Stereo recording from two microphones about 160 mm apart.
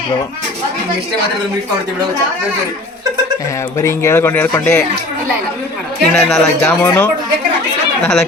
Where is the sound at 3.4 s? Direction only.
20° left (ahead or behind).